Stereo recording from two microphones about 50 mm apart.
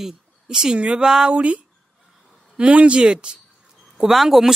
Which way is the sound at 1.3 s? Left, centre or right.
Right.